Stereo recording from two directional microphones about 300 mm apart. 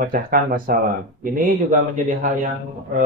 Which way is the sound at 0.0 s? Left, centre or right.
Right.